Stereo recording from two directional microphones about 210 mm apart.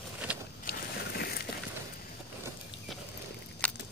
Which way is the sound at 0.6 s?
50° left (ahead or behind).